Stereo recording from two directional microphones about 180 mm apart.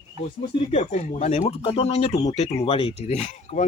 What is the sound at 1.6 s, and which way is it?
Speech, 30° left (ahead or behind).